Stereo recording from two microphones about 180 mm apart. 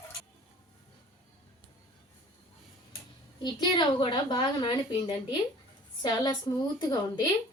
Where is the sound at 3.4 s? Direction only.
25° left (ahead or behind).